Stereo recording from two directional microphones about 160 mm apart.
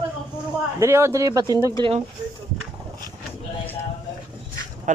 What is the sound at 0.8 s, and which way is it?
Speech, 15° right (ahead or behind).